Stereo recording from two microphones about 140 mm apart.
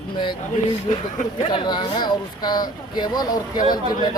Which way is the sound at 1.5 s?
35° left (ahead or behind).